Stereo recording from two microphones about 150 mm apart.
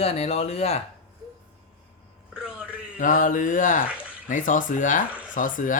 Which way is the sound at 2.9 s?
65° left (ahead or behind).